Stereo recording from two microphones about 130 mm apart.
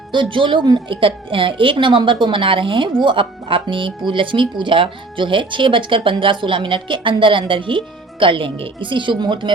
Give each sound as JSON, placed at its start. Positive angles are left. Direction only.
{"t": 0.1, "sound": "speech", "side_deg": -40}